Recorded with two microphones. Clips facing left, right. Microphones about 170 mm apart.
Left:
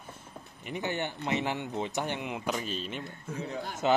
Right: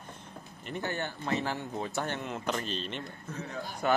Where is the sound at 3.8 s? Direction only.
20° left (ahead or behind).